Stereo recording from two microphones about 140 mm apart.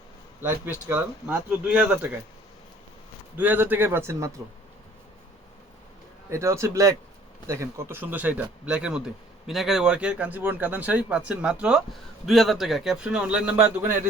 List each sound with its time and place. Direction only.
0.4 s speech: 15° right (ahead or behind)
3.3 s speech: 10° right (ahead or behind)
6.3 s a man's voice: 20° right (ahead or behind)